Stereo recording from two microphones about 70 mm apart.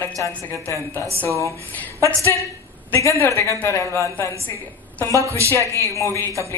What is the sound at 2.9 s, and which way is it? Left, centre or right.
Speech, left.